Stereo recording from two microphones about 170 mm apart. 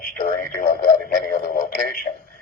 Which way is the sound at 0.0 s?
55° left (ahead or behind).